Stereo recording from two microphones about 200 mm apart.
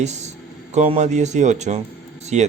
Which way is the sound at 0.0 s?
35° right (ahead or behind).